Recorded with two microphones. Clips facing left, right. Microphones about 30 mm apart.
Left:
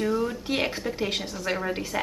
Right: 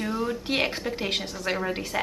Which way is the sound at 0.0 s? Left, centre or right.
Centre.